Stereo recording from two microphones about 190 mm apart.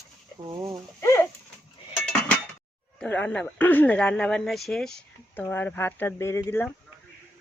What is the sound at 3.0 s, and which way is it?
Speech, 5° left (ahead or behind).